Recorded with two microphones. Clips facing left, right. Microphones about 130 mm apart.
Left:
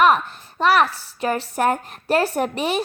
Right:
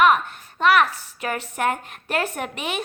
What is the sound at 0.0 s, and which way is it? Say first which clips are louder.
A woman's voice: left 1 dB; 35° left (ahead or behind).